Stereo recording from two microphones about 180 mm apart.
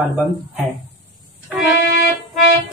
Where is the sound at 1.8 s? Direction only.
70° left (ahead or behind).